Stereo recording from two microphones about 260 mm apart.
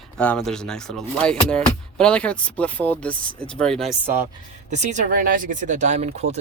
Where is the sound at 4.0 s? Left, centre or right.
Centre.